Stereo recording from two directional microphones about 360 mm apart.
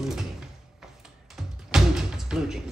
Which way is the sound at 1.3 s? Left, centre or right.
Centre.